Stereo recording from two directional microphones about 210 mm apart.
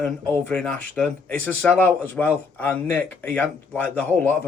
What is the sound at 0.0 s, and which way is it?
Speech, 5° left (ahead or behind).